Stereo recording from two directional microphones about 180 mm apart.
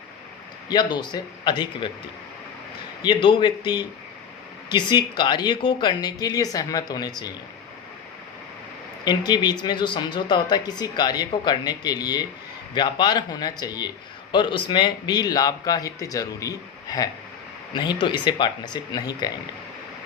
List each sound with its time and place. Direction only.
0.7 s speech: 25° left (ahead or behind)
3.0 s speech: 25° left (ahead or behind)
9.0 s speech: 25° left (ahead or behind)